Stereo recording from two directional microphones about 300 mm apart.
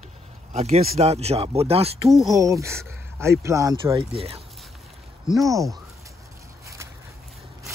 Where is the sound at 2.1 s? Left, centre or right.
Centre.